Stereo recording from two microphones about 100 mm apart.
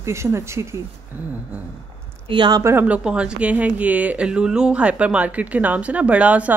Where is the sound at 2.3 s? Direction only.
50° right (ahead or behind).